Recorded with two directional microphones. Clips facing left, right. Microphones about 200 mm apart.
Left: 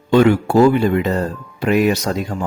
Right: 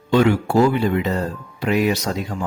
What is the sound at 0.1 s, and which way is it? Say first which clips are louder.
Speech: left 4 dB; 50° left (ahead or behind).